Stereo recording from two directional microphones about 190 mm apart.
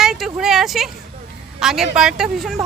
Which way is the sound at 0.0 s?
Centre (ahead or behind).